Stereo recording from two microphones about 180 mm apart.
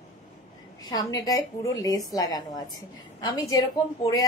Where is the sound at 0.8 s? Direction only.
20° left (ahead or behind).